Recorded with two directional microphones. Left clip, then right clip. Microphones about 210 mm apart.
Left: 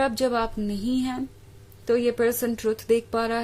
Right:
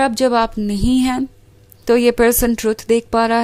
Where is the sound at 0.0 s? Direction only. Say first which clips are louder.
Right 9 dB; 30° right (ahead or behind).